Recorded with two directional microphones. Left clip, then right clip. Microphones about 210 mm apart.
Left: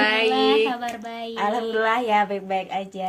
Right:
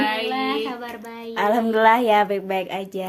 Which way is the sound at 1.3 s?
55° right (ahead or behind).